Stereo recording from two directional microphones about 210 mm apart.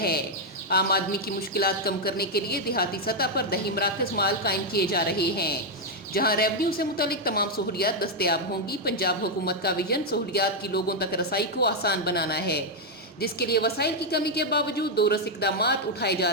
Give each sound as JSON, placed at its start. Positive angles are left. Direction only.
{"t": 0.7, "sound": "a woman's voice", "side_deg": 50}